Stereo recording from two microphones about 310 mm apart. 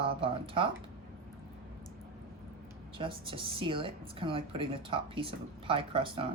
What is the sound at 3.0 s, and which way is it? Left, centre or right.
A woman's voice, centre.